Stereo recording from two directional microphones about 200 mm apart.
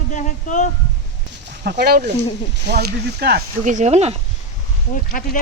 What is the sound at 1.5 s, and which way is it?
Speech, 55° right (ahead or behind).